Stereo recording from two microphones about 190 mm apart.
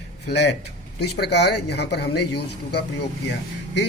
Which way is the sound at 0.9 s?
60° left (ahead or behind).